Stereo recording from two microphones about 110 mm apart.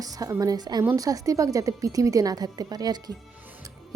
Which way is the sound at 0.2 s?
35° right (ahead or behind).